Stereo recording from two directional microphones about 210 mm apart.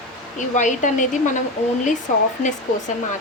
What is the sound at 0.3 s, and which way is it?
Speech, 35° left (ahead or behind).